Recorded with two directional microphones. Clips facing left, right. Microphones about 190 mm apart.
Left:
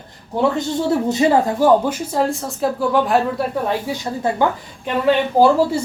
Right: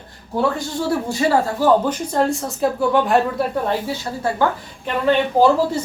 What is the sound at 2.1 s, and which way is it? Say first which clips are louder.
A woman's voice: right 2 dB; centre (ahead or behind).